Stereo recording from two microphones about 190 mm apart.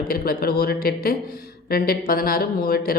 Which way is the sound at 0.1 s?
50° left (ahead or behind).